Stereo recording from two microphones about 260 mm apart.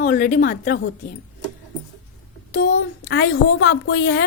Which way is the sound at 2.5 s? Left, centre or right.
Left.